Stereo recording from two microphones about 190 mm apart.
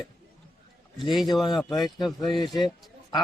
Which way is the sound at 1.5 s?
25° left (ahead or behind).